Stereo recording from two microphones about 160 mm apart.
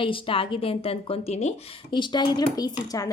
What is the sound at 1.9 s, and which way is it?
Speech, 30° left (ahead or behind).